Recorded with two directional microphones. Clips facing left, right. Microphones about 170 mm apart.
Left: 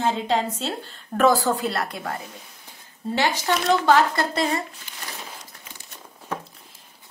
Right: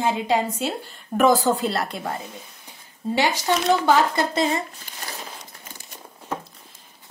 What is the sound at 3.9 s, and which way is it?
Speech, 20° right (ahead or behind).